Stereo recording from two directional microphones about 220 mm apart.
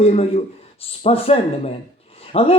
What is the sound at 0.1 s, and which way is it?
Speech, 30° left (ahead or behind).